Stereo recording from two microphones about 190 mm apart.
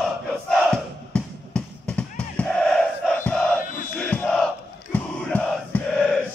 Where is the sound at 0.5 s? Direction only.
5° left (ahead or behind).